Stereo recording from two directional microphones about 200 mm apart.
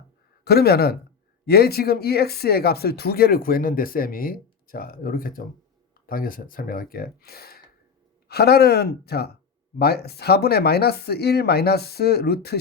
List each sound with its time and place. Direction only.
0.4 s speech: 50° left (ahead or behind)